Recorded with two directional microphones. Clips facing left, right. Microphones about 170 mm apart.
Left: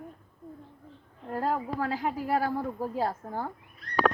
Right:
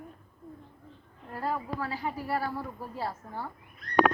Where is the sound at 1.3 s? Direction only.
45° left (ahead or behind).